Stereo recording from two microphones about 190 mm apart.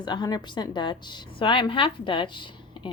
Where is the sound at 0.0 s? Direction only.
20° left (ahead or behind).